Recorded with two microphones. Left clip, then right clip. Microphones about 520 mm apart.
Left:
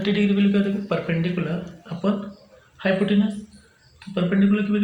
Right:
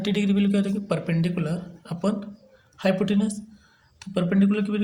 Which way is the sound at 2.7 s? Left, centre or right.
Right.